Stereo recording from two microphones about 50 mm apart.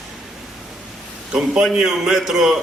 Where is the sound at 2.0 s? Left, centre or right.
Centre.